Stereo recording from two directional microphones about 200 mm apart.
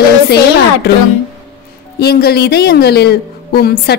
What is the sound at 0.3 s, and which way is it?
Speech, 55° left (ahead or behind).